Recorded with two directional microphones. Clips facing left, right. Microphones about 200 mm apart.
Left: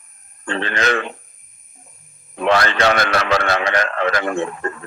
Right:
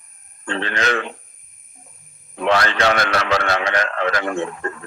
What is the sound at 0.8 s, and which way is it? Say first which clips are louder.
Speech: left 2 dB; 55° left (ahead or behind).